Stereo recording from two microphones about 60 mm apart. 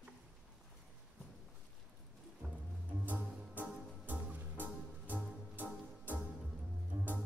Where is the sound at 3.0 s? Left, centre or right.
Right.